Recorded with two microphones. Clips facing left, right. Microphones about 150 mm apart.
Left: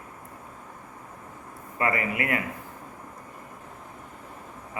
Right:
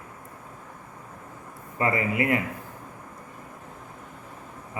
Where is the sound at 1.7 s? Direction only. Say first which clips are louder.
Right 2 dB; 25° right (ahead or behind).